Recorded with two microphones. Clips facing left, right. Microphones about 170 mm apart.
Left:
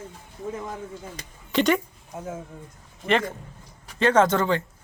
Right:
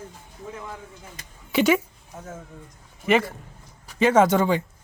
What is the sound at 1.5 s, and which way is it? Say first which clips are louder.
Speech: right 2 dB; 5° right (ahead or behind).